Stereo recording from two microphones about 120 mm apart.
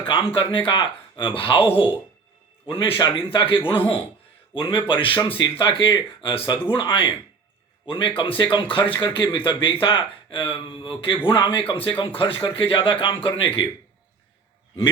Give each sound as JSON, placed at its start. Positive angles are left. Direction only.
{"t": 0.0, "sound": "speech", "side_deg": 45}
{"t": 2.6, "sound": "speech", "side_deg": 50}